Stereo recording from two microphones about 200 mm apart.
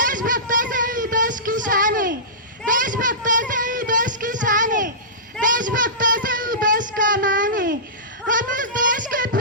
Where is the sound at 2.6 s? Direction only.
40° right (ahead or behind).